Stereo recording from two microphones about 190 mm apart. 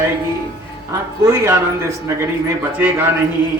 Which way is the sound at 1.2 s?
15° right (ahead or behind).